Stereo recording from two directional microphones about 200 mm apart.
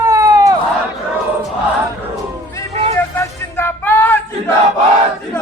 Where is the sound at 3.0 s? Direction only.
10° left (ahead or behind).